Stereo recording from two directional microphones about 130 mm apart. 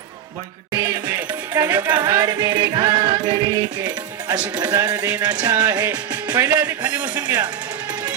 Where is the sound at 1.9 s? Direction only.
30° right (ahead or behind).